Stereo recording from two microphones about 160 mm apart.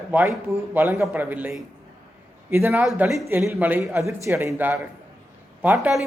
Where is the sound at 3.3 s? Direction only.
15° right (ahead or behind).